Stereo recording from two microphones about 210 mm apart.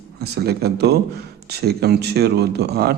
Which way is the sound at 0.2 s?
50° right (ahead or behind).